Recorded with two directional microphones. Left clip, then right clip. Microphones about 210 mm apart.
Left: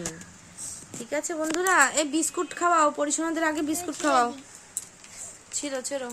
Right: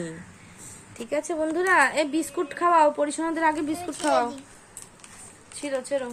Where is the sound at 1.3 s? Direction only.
20° left (ahead or behind); by 4.3 s 35° left (ahead or behind).